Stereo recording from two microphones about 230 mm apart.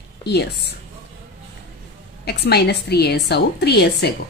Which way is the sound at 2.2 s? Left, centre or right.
Left.